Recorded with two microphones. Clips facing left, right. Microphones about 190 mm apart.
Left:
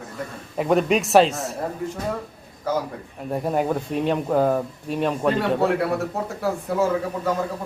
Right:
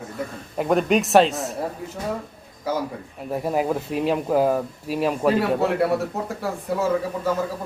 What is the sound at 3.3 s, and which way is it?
A man's voice, centre (ahead or behind).